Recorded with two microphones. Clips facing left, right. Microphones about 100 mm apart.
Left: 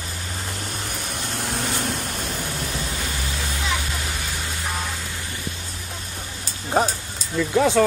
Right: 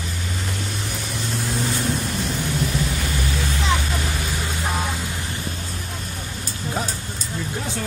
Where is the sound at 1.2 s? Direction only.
60° left (ahead or behind).